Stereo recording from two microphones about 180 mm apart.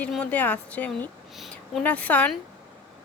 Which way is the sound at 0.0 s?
5° left (ahead or behind).